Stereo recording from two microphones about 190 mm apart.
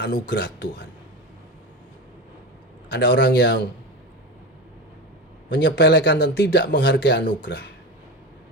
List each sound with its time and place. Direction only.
0.0 s speech: 65° left (ahead or behind)
2.9 s speech: 65° left (ahead or behind)
5.5 s speech: 65° left (ahead or behind)